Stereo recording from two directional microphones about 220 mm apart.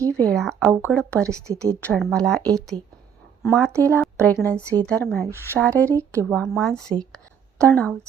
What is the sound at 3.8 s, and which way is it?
Speech, 10° left (ahead or behind).